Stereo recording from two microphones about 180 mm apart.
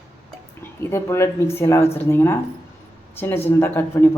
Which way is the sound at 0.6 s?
15° left (ahead or behind).